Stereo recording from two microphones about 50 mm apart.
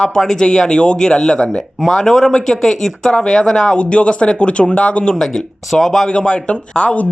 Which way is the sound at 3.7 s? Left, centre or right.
Left.